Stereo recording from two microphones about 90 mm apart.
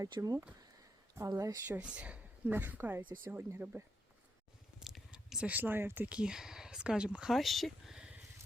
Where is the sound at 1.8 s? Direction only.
15° right (ahead or behind).